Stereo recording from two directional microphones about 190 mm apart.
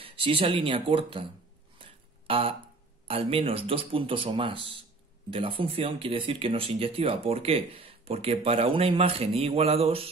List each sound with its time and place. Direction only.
0.0 s a man's voice: 30° right (ahead or behind)
1.8 s a sound: 30° right (ahead or behind)
3.1 s a man's voice: 30° right (ahead or behind)